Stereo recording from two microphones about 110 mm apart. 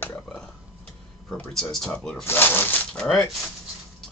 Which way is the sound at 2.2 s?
20° left (ahead or behind).